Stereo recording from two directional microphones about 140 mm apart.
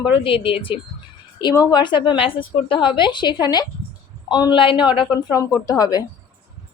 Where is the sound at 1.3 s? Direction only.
30° left (ahead or behind).